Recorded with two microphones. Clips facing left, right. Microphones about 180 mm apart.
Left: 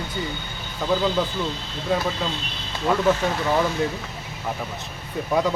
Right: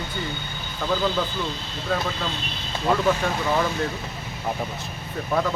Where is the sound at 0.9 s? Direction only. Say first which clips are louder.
Left 2 dB; 10° left (ahead or behind).